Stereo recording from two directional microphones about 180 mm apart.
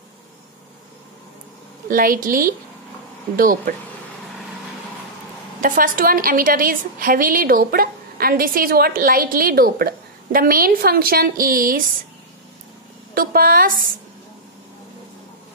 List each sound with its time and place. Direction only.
1.9 s a woman's voice: 50° right (ahead or behind)
5.6 s a woman's voice: 50° right (ahead or behind)
13.1 s a woman's voice: 55° right (ahead or behind)